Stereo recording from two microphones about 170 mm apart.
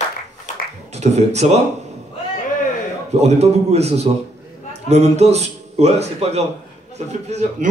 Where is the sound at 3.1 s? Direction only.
40° right (ahead or behind).